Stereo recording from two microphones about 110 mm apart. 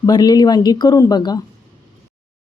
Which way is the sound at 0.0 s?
35° left (ahead or behind).